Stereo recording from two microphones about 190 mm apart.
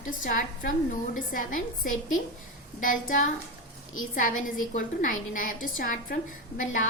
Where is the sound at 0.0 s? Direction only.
45° left (ahead or behind).